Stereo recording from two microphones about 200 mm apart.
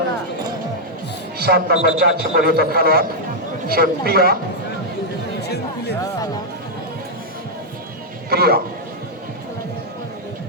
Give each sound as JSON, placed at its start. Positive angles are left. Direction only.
{"t": 1.4, "sound": "a man's voice", "side_deg": -50}
{"t": 5.4, "sound": "chatter", "side_deg": 55}
{"t": 8.3, "sound": "speech", "side_deg": -50}